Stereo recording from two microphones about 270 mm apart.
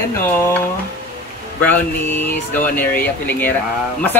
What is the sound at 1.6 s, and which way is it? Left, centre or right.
Speech, centre.